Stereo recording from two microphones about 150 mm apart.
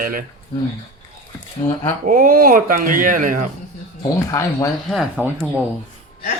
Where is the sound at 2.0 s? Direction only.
65° right (ahead or behind).